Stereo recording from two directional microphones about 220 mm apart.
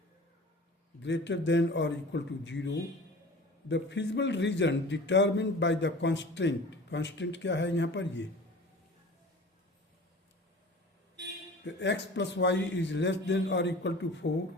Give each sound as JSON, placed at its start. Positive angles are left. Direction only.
{"t": 1.0, "sound": "a man's voice", "side_deg": 55}
{"t": 11.6, "sound": "a man's voice", "side_deg": 55}